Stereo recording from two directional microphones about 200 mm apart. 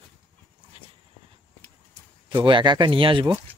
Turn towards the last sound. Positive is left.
turn(degrees=-25)  # may be behind; listen again after turning